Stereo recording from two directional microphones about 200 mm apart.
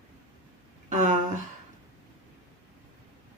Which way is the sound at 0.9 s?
40° right (ahead or behind).